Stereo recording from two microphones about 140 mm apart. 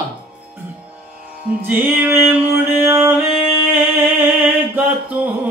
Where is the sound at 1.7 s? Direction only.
15° right (ahead or behind).